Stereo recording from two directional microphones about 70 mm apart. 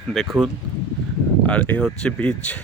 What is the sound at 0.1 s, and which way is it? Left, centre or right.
Speech, centre.